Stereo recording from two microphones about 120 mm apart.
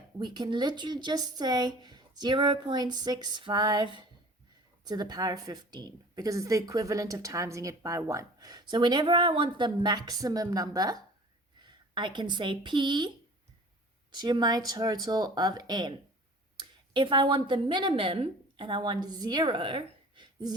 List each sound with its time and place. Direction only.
0.2 s a woman's voice: 40° right (ahead or behind)
14.1 s a woman's voice: 35° right (ahead or behind)